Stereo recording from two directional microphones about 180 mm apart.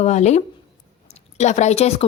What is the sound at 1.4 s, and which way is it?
Speech, 40° left (ahead or behind).